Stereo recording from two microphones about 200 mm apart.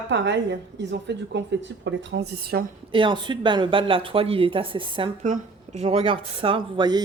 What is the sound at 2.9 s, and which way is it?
A woman's voice, 25° right (ahead or behind).